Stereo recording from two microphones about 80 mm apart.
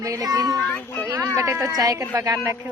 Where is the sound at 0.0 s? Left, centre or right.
Right.